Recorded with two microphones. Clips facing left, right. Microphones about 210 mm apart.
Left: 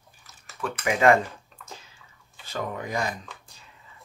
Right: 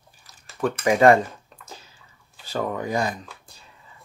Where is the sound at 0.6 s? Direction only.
35° right (ahead or behind).